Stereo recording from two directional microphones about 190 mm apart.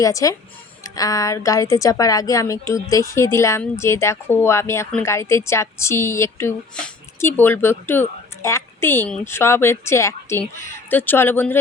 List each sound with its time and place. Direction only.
0.0 s a woman's voice: 15° left (ahead or behind)